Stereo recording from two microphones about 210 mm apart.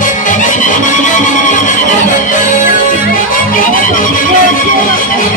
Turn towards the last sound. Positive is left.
turn(degrees=40)  # may be behind; listen again after turning